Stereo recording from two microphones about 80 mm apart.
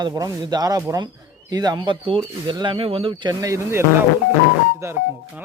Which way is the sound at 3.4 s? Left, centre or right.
Right.